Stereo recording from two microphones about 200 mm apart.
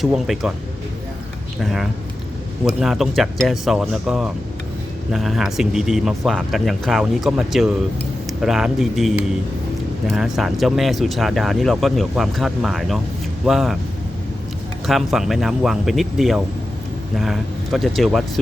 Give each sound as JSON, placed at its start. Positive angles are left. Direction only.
{"t": 0.0, "sound": "speech", "side_deg": 0}
{"t": 1.6, "sound": "speech", "side_deg": 0}
{"t": 14.8, "sound": "speech", "side_deg": 0}